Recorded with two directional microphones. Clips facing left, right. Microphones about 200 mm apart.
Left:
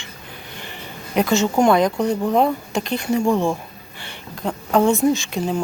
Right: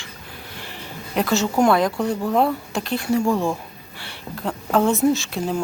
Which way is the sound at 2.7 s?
Centre (ahead or behind).